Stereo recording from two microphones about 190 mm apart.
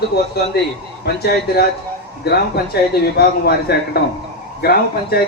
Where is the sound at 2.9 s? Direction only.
55° left (ahead or behind).